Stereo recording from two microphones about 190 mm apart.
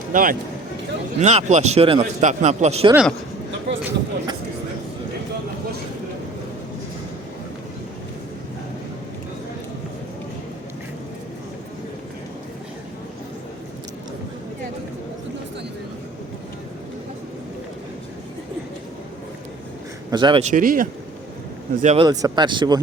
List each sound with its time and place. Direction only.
0.1 s speech: 45° right (ahead or behind)
1.2 s speech: 35° right (ahead or behind)
2.9 s speech: 5° right (ahead or behind)
20.1 s speech: 25° right (ahead or behind)
20.4 s speech: 45° right (ahead or behind)
22.0 s speech: 20° right (ahead or behind)